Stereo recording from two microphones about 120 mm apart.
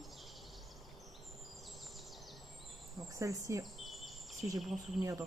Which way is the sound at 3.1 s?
30° right (ahead or behind).